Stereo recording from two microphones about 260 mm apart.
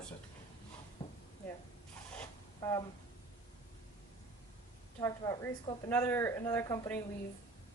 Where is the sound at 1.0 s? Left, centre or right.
Centre.